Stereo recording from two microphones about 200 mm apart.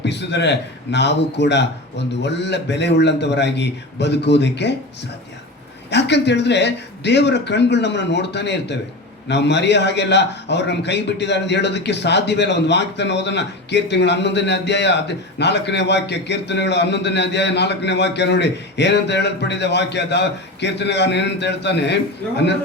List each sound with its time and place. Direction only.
0.0 s a man's voice: 60° left (ahead or behind)
5.9 s a man's voice: 60° left (ahead or behind)